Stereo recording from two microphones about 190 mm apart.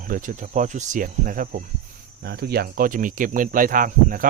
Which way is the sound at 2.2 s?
55° right (ahead or behind).